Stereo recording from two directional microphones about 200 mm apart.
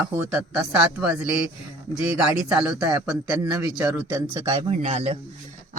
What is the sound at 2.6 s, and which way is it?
Speech, 15° right (ahead or behind).